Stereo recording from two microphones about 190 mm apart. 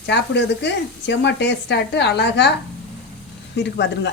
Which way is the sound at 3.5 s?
65° left (ahead or behind).